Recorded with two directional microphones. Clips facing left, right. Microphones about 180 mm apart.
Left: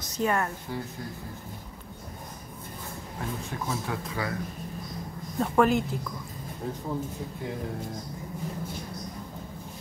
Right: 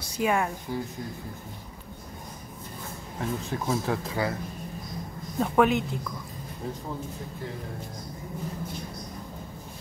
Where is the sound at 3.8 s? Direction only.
30° right (ahead or behind).